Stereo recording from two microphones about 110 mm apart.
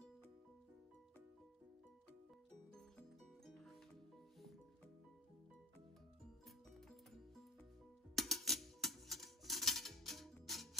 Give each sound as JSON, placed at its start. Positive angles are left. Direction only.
{"t": 3.4, "sound": "music", "side_deg": 5}
{"t": 8.2, "sound": "music", "side_deg": 0}